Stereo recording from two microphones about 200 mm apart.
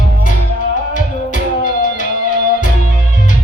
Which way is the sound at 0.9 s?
40° left (ahead or behind).